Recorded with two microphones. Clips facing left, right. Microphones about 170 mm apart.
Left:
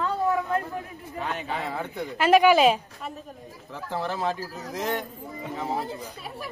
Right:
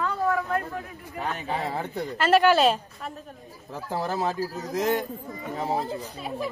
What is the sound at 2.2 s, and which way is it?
Speech, 10° left (ahead or behind).